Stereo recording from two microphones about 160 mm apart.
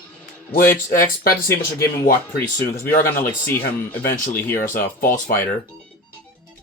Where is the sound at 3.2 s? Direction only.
15° left (ahead or behind).